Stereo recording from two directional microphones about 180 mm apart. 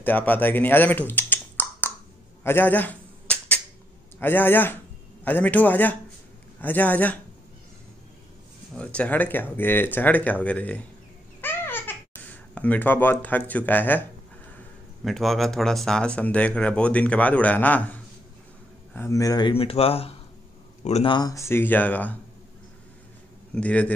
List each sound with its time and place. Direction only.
0.0 s speech: 10° left (ahead or behind)
2.4 s cap gun: 10° left (ahead or behind)
4.2 s speech: 10° left (ahead or behind)
8.7 s speech: 5° left (ahead or behind)
11.4 s babbling: 10° left (ahead or behind)
15.0 s speech: centre (ahead or behind)
23.5 s speech: 5° left (ahead or behind)